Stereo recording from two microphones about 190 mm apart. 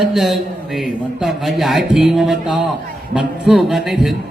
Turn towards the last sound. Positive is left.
turn(degrees=0)  # may be behind; listen again after turning